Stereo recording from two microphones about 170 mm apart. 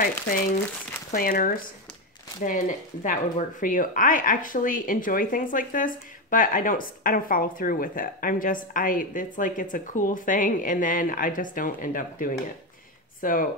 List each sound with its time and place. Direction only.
1.1 s speech: 55° left (ahead or behind)